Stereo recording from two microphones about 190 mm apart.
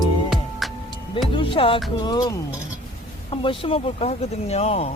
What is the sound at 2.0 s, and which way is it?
Speech, 20° left (ahead or behind).